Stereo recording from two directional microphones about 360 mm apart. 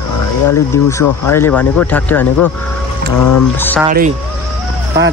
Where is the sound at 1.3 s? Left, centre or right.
Centre.